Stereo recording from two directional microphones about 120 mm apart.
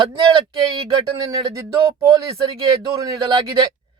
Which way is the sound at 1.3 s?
30° right (ahead or behind).